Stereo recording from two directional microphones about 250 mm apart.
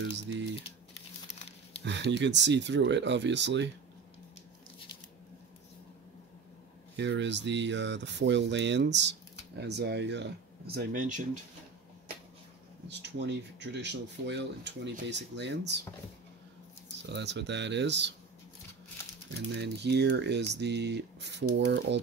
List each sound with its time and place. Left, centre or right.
0.0 s speech: right
1.9 s speech: right
7.0 s speech: right
12.8 s speech: right
17.0 s speech: right
19.5 s speech: right